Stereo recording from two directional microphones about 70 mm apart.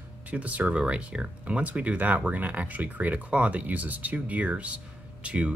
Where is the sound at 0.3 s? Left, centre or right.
Right.